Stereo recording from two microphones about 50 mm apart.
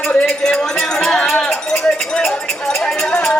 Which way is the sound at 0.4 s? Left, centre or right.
Centre.